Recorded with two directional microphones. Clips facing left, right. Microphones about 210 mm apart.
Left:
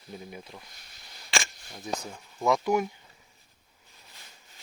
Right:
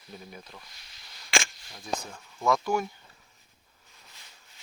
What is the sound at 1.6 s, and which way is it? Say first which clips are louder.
Speech: even; 20° left (ahead or behind).